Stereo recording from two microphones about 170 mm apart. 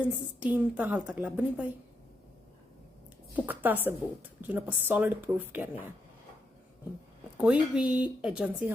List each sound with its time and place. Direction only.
0.0 s a woman's voice: 10° right (ahead or behind)
3.3 s a woman's voice: 10° right (ahead or behind)
7.3 s a woman's voice: 5° right (ahead or behind)